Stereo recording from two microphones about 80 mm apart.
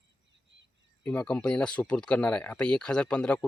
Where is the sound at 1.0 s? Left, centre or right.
Left.